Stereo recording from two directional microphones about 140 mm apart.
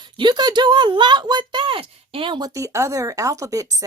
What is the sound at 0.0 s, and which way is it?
A woman's voice, 30° right (ahead or behind).